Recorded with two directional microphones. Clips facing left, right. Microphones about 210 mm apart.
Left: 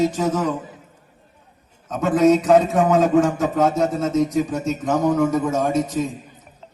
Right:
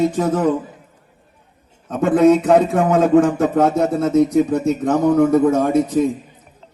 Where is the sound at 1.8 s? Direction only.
55° right (ahead or behind).